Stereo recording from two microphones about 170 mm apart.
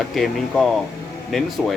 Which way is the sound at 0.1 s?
Centre (ahead or behind).